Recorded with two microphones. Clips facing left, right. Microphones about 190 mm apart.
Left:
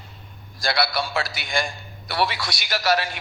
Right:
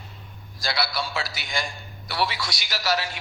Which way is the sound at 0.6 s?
60° left (ahead or behind).